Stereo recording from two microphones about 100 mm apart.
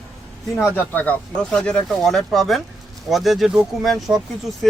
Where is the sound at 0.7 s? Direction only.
20° left (ahead or behind); by 4.7 s centre (ahead or behind).